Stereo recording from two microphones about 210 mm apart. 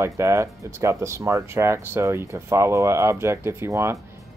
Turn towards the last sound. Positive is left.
turn(degrees=-10)  # may be behind; listen again after turning